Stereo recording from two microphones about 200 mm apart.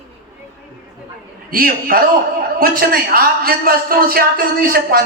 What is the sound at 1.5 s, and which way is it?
A man's voice, 45° right (ahead or behind).